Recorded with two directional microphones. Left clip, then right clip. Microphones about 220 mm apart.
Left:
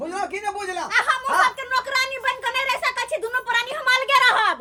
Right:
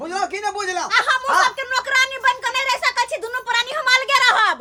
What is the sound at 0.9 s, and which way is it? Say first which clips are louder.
Speech: right 3 dB; 45° right (ahead or behind).